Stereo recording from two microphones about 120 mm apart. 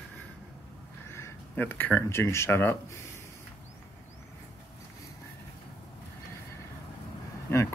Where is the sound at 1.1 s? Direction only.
20° left (ahead or behind).